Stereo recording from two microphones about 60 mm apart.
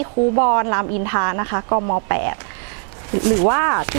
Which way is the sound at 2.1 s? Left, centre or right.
Right.